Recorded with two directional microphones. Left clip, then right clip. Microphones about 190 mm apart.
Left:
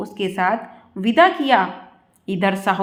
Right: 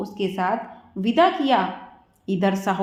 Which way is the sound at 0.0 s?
25° left (ahead or behind).